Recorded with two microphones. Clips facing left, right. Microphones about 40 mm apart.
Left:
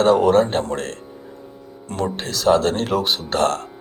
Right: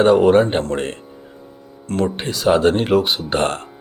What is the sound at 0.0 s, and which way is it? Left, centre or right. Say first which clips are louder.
Speech: right 2 dB; centre.